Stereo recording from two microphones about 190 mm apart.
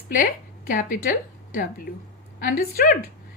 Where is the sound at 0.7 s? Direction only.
45° left (ahead or behind).